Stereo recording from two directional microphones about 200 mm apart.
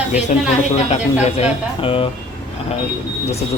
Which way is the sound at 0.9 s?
30° left (ahead or behind).